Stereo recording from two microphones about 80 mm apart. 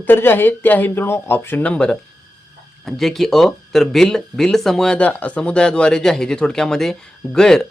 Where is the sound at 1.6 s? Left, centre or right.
Centre.